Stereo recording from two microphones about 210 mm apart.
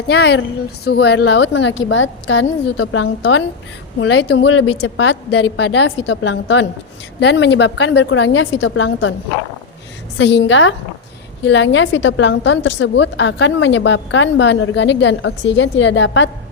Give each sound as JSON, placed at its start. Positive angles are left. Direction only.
{"t": 0.1, "sound": "a woman's voice", "side_deg": 55}
{"t": 10.2, "sound": "a woman's voice", "side_deg": 60}